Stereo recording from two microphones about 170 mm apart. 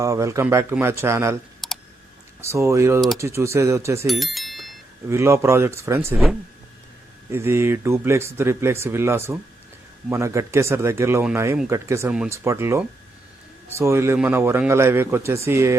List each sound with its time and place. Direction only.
0.0 s speech: 20° right (ahead or behind)
1.6 s clicking: centre (ahead or behind)
2.4 s speech: 15° right (ahead or behind)
4.0 s bicycle bell: centre (ahead or behind)
5.0 s speech: 15° right (ahead or behind)
7.3 s speech: 15° right (ahead or behind)